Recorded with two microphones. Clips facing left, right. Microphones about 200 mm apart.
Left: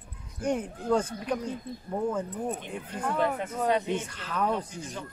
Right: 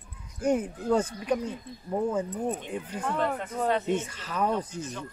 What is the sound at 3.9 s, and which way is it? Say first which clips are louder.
Speech: right 2 dB; 5° right (ahead or behind).